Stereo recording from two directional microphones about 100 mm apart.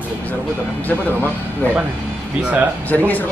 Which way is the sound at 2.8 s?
15° left (ahead or behind).